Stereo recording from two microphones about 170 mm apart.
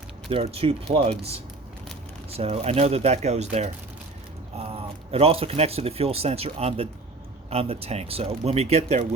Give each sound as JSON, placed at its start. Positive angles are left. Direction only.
{"t": 0.3, "sound": "speech", "side_deg": -35}
{"t": 2.3, "sound": "speech", "side_deg": -35}